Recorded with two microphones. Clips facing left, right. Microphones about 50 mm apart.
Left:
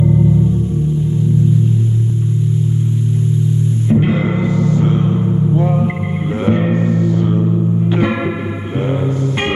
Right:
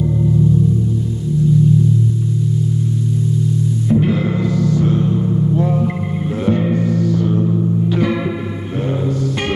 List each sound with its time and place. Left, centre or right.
3.9 s music: left